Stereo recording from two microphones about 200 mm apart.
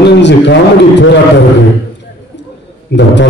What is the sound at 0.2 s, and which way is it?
A man's voice, 60° left (ahead or behind).